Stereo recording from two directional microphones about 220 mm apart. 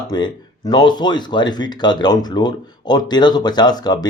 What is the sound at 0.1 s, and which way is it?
Speech, 20° left (ahead or behind).